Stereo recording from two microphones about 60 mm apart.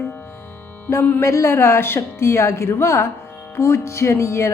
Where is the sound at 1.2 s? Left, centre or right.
Left.